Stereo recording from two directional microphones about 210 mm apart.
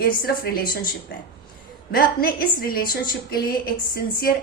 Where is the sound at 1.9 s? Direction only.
45° left (ahead or behind).